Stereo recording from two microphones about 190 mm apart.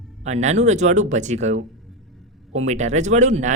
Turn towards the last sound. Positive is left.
turn(degrees=-40)  # may be behind; listen again after turning